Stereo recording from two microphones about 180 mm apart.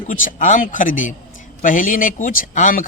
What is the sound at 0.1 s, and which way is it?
Speech, 45° left (ahead or behind).